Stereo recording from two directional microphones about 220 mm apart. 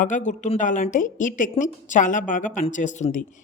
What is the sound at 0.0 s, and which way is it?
A woman's voice, 35° left (ahead or behind).